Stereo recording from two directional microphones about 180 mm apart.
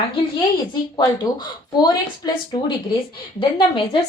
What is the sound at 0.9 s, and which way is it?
A woman's voice, 20° left (ahead or behind).